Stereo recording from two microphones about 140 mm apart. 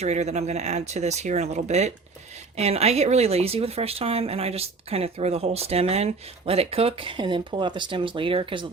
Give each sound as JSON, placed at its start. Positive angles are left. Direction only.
{"t": 0.0, "sound": "speech", "side_deg": -50}